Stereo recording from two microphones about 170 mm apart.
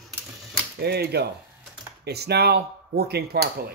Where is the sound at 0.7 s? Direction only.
65° right (ahead or behind).